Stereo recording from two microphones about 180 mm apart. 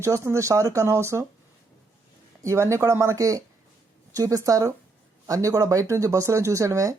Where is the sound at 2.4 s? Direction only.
15° right (ahead or behind).